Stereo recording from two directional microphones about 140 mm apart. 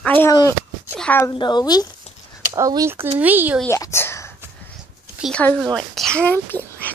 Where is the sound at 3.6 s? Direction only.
20° left (ahead or behind).